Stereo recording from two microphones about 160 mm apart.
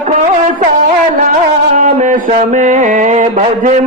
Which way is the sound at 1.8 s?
50° right (ahead or behind).